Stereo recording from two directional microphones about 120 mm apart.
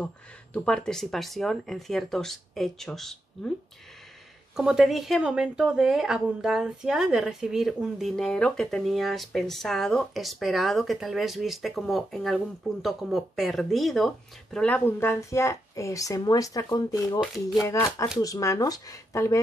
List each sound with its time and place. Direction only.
0.0 s speech: 10° left (ahead or behind)
4.6 s speech: 5° right (ahead or behind)
14.9 s a woman's voice: 20° left (ahead or behind); by 17.2 s 35° left (ahead or behind)
17.6 s a woman's voice: 25° left (ahead or behind)